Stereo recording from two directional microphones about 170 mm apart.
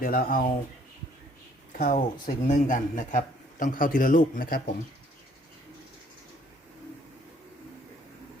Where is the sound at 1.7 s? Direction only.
60° left (ahead or behind).